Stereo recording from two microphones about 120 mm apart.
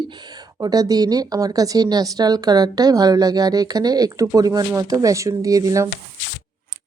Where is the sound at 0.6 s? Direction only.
30° right (ahead or behind).